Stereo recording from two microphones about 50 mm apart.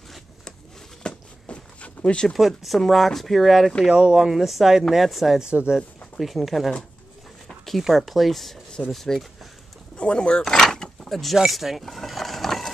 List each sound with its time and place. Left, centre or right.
1.0 s a sound: left
2.2 s speech: centre
3.9 s speech: centre
5.4 s speech: centre
5.8 s speech: centre
7.4 s a sound: centre
7.8 s speech: centre
9.9 s speech: left; by 11.8 s centre
11.8 s vehicle: centre